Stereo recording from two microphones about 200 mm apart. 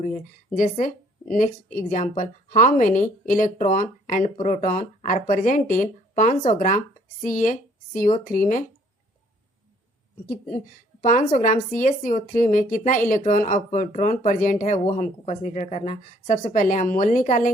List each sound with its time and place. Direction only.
0.0 s a woman's voice: 40° left (ahead or behind)
11.0 s a woman's voice: 40° left (ahead or behind)